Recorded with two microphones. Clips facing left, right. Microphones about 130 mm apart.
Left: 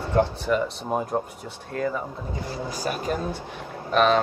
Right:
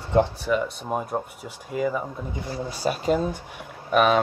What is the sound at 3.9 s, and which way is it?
Speech, 10° right (ahead or behind).